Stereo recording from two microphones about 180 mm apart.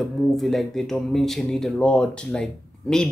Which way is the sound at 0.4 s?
Centre (ahead or behind).